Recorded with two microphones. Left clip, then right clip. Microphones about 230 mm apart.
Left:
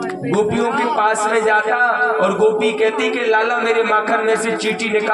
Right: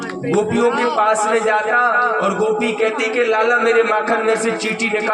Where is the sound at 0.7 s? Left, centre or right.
Right.